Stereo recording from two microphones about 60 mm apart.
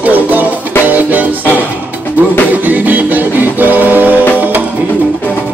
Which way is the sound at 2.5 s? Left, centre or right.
Right.